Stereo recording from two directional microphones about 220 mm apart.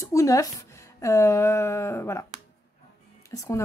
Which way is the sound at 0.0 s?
15° left (ahead or behind).